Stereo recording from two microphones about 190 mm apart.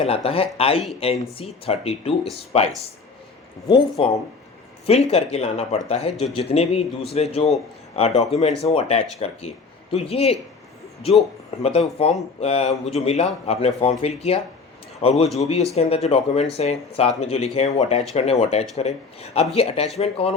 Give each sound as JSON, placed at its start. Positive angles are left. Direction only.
{"t": 0.0, "sound": "speech", "side_deg": 30}
{"t": 4.0, "sound": "speech", "side_deg": 30}
{"t": 11.6, "sound": "speech", "side_deg": 30}